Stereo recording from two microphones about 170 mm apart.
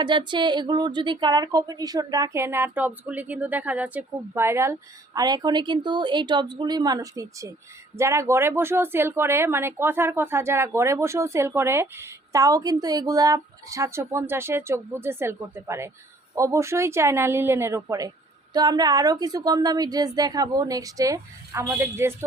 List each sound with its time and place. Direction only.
0.0 s a woman's voice: 25° right (ahead or behind)